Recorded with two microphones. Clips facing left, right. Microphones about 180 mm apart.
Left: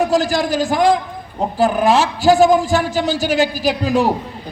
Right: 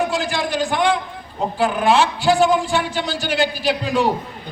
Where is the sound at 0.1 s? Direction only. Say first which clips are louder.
Left 6 dB; 40° left (ahead or behind).